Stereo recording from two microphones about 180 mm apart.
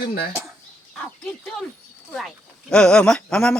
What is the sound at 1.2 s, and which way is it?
Speech, 5° left (ahead or behind).